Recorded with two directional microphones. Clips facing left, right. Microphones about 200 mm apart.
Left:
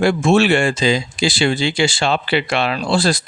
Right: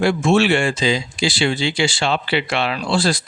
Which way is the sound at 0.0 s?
45° left (ahead or behind).